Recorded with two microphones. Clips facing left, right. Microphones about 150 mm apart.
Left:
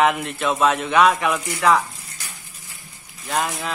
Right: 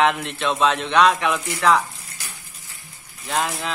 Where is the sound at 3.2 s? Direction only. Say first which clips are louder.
Even; centre (ahead or behind).